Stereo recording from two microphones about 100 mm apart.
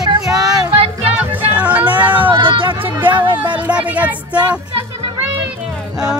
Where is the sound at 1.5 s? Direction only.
15° right (ahead or behind).